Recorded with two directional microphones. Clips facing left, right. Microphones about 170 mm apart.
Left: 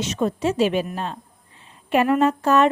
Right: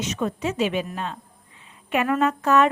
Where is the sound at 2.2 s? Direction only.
30° left (ahead or behind).